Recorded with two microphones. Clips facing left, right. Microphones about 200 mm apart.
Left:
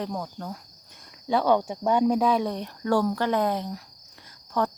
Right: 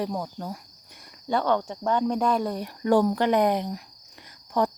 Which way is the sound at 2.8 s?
20° right (ahead or behind).